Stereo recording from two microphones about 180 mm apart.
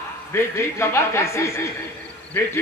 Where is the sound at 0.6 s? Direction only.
15° left (ahead or behind).